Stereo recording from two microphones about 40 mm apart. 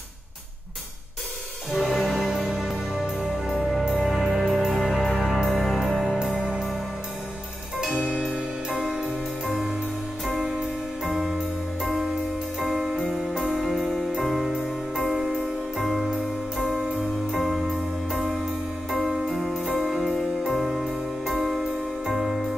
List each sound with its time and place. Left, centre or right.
1.7 s music: centre
6.3 s music: right
7.8 s music: centre
11.1 s music: centre
17.3 s music: centre
18.9 s music: centre